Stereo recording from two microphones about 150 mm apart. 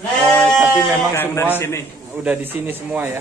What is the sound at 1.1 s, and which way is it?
Speech, 15° left (ahead or behind).